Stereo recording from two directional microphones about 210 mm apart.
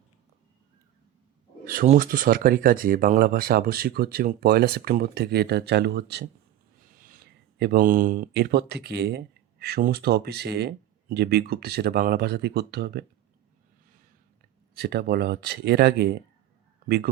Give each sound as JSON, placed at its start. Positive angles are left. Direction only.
{"t": 1.6, "sound": "speech", "side_deg": -40}
{"t": 7.6, "sound": "speech", "side_deg": -45}
{"t": 14.8, "sound": "speech", "side_deg": -50}